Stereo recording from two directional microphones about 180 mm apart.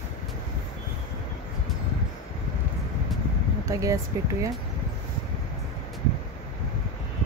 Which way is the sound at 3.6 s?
20° right (ahead or behind).